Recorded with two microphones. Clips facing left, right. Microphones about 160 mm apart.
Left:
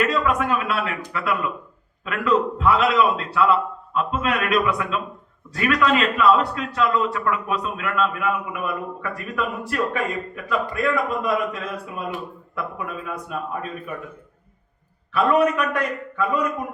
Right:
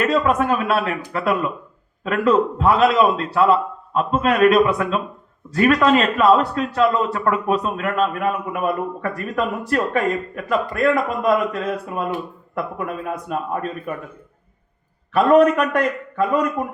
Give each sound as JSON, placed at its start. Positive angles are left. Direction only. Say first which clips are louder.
{"t": 0.0, "sound": "a man's voice", "louder": "right 3 dB", "side_deg": -40}
{"t": 15.1, "sound": "a man's voice", "louder": "right 5 dB", "side_deg": -45}